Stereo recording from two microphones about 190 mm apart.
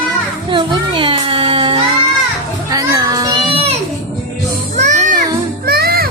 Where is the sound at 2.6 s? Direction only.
20° right (ahead or behind).